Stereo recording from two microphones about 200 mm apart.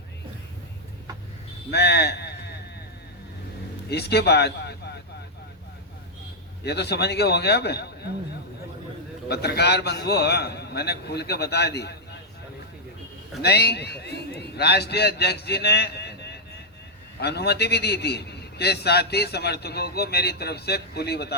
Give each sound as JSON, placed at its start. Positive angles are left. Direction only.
{"t": 1.7, "sound": "speech", "side_deg": 55}
{"t": 3.8, "sound": "speech", "side_deg": 55}
{"t": 6.7, "sound": "a man's voice", "side_deg": 55}
{"t": 9.3, "sound": "a man's voice", "side_deg": 55}
{"t": 13.4, "sound": "a man's voice", "side_deg": 55}